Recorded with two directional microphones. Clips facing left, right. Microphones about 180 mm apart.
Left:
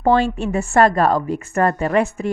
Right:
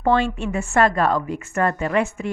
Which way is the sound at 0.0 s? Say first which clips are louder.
Left 3 dB; 35° left (ahead or behind).